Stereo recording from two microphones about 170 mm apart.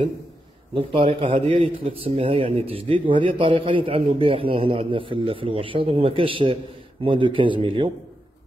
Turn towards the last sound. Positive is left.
turn(degrees=-30)  # may be behind; listen again after turning